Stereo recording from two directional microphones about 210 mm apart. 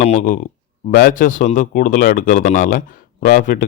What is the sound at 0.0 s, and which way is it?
Speech, 35° left (ahead or behind).